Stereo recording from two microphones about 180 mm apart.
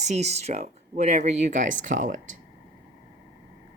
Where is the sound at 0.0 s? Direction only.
40° right (ahead or behind).